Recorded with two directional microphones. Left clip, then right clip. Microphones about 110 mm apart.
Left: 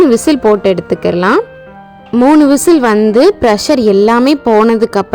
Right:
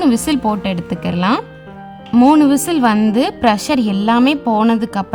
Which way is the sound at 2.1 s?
15° left (ahead or behind).